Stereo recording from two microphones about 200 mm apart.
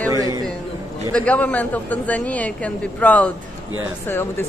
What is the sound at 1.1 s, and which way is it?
A woman's voice, 5° left (ahead or behind).